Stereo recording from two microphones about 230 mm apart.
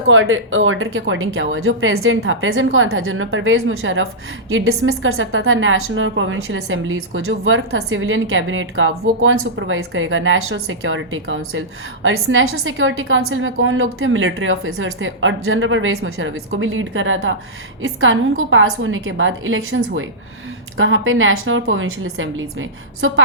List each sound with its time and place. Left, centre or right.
0.1 s speech: right